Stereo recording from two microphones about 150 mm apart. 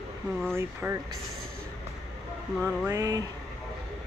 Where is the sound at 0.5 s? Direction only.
15° right (ahead or behind).